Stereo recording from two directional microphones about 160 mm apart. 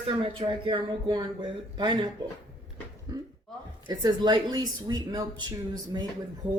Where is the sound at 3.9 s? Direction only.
25° right (ahead or behind).